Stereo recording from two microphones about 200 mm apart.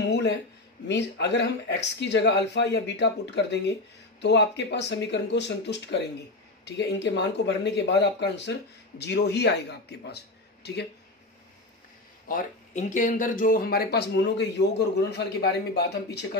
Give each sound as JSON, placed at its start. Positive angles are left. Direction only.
{"t": 0.0, "sound": "a sound", "side_deg": 60}
{"t": 0.8, "sound": "speech", "side_deg": 60}
{"t": 12.3, "sound": "speech", "side_deg": 40}